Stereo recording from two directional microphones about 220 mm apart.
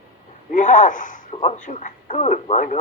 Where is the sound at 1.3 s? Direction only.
30° left (ahead or behind).